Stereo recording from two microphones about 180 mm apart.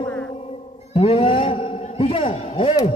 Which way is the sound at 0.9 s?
30° left (ahead or behind).